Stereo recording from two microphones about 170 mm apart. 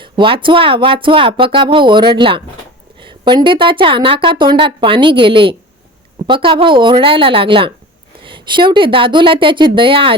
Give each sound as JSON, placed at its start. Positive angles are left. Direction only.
{"t": 0.0, "sound": "a woman's voice", "side_deg": -30}